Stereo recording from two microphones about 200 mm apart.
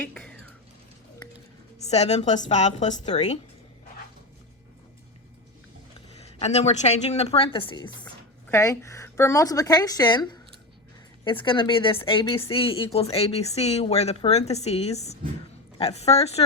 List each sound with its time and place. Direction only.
0.0 s speech: 5° left (ahead or behind)
1.8 s speech: 35° left (ahead or behind)
6.4 s speech: 35° left (ahead or behind)
8.0 s a woman's voice: 10° left (ahead or behind); by 16.4 s 30° left (ahead or behind)